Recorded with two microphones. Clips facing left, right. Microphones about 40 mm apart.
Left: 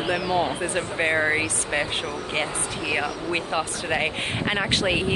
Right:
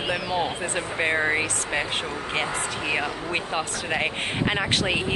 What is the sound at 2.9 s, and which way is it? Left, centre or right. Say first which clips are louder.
Speech: left 2 dB; centre.